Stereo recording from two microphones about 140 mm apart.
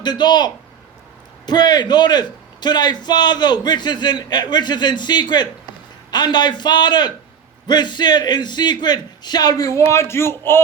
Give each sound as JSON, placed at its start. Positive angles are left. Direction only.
{"t": 0.0, "sound": "a man's voice", "side_deg": 30}